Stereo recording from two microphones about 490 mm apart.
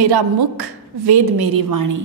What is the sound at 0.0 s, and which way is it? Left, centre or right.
A woman's voice, right.